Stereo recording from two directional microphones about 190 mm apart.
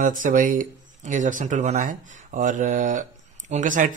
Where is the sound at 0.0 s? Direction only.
45° right (ahead or behind).